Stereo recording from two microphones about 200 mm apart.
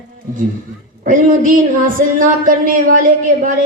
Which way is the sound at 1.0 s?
40° right (ahead or behind).